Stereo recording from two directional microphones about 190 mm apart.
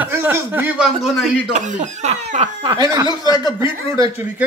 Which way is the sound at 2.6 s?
20° right (ahead or behind).